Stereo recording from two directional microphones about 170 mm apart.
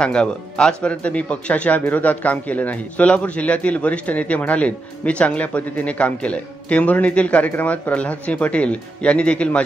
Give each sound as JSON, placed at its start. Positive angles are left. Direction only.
{"t": 0.0, "sound": "speech", "side_deg": 5}